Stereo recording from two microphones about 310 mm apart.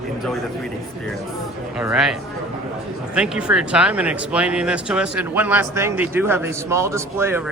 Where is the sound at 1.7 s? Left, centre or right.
Centre.